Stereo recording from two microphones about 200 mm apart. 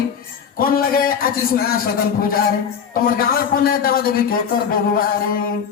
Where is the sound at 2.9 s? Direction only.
45° left (ahead or behind).